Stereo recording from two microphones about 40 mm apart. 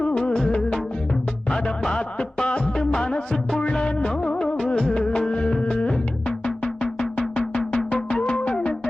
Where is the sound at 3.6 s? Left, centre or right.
Left.